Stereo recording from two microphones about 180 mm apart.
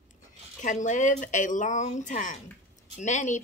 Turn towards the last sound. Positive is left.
turn(degrees=40)  # may be behind; listen again after turning